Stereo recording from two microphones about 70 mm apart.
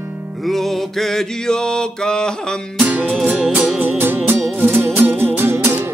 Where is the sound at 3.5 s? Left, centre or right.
Right.